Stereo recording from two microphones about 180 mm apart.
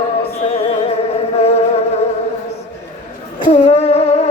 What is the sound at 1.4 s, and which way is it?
Music, 35° left (ahead or behind).